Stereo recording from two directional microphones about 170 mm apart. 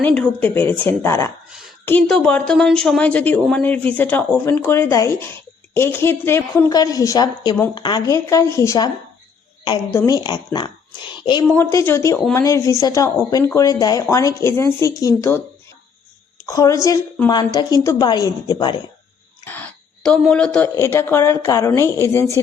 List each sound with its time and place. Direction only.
0.0 s a woman's voice: 5° left (ahead or behind)
10.1 s speech: 25° left (ahead or behind)
11.4 s a woman's voice: 10° left (ahead or behind)
16.5 s speech: 20° left (ahead or behind)
19.5 s a sound: 10° left (ahead or behind)
20.7 s a woman's voice: 15° left (ahead or behind)